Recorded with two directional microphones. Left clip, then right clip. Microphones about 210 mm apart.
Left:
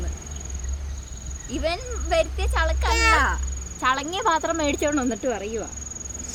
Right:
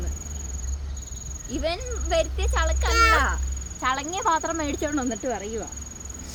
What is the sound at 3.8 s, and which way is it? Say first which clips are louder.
Speech: left 2 dB; 15° left (ahead or behind).